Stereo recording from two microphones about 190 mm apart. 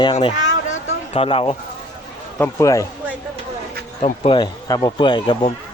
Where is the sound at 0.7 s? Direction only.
30° left (ahead or behind).